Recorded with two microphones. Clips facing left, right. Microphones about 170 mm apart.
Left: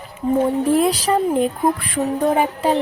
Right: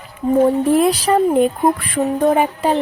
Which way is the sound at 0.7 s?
60° right (ahead or behind).